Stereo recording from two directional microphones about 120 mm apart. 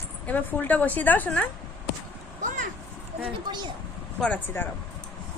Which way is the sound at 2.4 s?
90° right.